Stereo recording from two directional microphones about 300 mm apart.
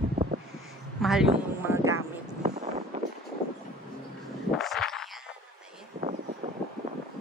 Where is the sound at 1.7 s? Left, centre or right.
Centre.